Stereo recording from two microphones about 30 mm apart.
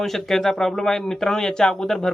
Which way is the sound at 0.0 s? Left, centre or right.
Centre.